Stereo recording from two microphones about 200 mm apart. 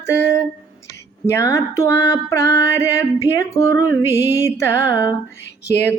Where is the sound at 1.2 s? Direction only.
15° left (ahead or behind).